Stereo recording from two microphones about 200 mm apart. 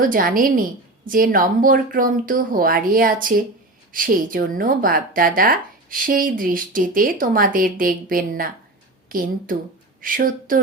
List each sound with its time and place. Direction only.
0.0 s speech: 45° right (ahead or behind)